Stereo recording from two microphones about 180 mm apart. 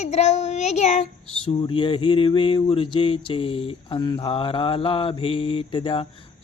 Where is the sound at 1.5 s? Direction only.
25° left (ahead or behind).